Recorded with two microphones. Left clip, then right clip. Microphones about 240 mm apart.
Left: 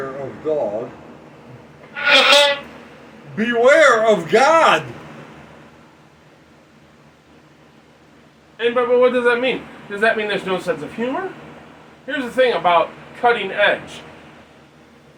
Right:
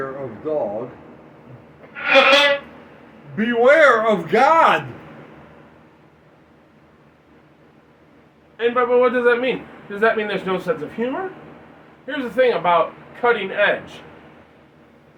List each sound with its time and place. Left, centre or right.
0.4 s a man's voice: centre
1.9 s a sound: left
3.3 s a man's voice: centre
8.5 s a man's voice: centre